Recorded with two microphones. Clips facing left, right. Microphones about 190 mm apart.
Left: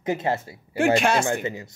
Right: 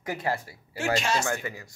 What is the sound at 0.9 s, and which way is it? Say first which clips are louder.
Speech: left 6 dB; 55° left (ahead or behind).